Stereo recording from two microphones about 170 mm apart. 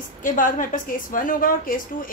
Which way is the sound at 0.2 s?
50° left (ahead or behind).